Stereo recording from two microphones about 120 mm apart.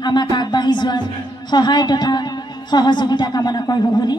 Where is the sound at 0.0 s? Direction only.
40° left (ahead or behind).